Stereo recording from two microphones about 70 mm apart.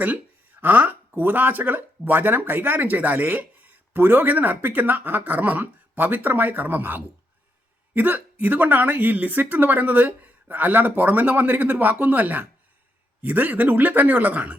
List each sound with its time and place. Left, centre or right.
0.6 s speech: right